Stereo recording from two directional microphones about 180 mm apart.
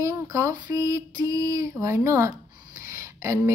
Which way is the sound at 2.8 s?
15° right (ahead or behind).